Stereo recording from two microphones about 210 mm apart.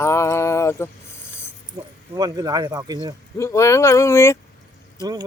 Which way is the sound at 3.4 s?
15° left (ahead or behind).